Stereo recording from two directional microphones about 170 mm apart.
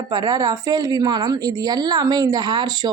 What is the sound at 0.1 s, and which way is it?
A woman's voice, 25° right (ahead or behind).